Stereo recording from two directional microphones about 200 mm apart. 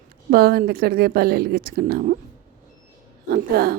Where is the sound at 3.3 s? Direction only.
50° right (ahead or behind).